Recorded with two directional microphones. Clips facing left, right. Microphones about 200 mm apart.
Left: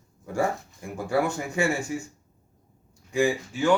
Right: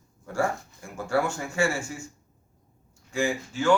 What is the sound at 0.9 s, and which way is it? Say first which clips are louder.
Speech: left 1 dB; 15° left (ahead or behind).